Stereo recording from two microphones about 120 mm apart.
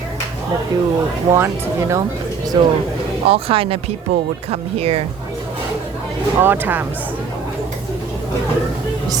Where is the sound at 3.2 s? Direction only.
50° right (ahead or behind).